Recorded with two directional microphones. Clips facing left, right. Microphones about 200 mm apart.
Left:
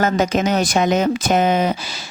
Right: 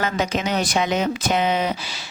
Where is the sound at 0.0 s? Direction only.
45° left (ahead or behind).